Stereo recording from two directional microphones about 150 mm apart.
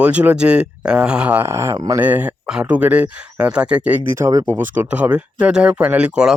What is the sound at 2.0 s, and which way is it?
Speech, 10° right (ahead or behind).